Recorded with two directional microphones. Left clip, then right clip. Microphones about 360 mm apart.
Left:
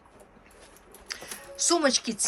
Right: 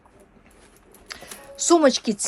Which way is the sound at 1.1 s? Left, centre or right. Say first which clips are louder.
Even; centre.